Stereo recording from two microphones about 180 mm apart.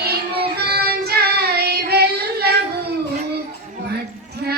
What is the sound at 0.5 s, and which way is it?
Child singing, 60° right (ahead or behind).